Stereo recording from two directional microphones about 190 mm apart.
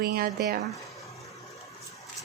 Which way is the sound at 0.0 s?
50° right (ahead or behind).